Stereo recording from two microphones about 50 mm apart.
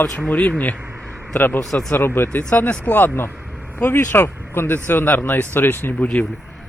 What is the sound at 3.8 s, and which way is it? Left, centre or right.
Speech, left.